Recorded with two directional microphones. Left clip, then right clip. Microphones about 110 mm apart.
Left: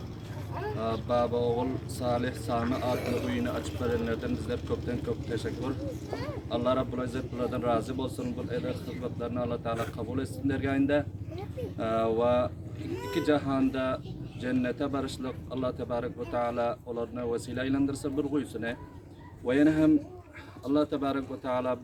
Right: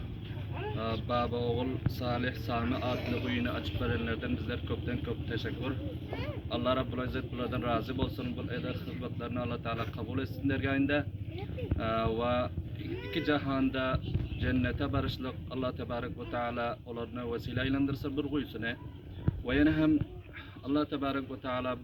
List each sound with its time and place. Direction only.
0.8 s a man's voice: 20° left (ahead or behind)